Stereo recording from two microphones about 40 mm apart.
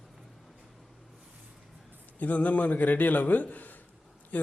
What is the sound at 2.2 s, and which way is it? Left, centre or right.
A man's voice, left.